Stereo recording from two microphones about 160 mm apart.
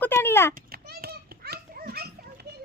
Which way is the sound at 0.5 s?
70° right (ahead or behind).